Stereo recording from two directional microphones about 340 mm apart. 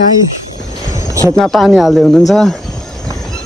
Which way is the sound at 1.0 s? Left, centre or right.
Centre.